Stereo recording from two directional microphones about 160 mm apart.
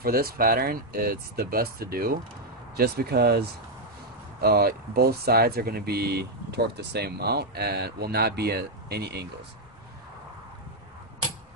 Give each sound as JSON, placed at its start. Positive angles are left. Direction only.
{"t": 0.0, "sound": "speech", "side_deg": -70}